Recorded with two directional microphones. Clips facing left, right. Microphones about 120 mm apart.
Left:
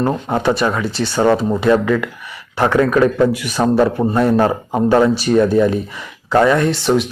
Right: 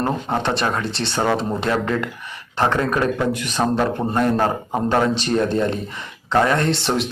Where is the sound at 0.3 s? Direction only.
5° left (ahead or behind).